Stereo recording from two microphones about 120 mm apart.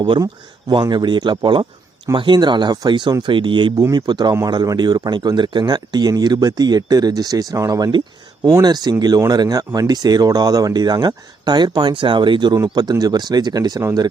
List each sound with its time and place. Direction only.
0.0 s speech: 35° right (ahead or behind)